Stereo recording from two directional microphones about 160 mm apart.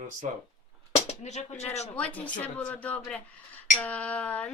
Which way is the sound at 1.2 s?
45° left (ahead or behind).